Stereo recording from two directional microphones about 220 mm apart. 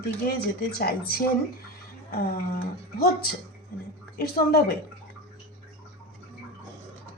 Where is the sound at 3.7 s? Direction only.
40° left (ahead or behind).